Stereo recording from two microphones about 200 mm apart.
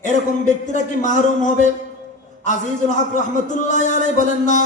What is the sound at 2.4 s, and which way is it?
A man's voice, 40° left (ahead or behind).